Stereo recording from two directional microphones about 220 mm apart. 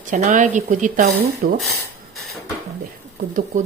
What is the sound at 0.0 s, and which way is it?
Speech, 35° right (ahead or behind).